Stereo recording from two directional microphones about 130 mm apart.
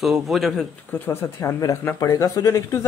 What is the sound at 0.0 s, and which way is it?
Speech, centre (ahead or behind).